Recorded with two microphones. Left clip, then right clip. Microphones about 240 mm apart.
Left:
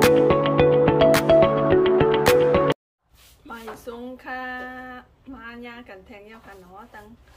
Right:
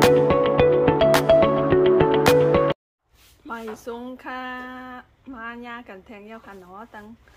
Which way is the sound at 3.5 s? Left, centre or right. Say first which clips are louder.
Right 3 dB; centre.